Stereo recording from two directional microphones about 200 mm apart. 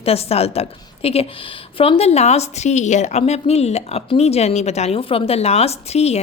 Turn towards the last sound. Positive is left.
turn(degrees=30)  # may be behind; listen again after turning